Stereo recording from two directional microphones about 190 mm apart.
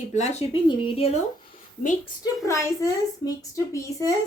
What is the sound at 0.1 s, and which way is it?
A woman's voice, 35° left (ahead or behind).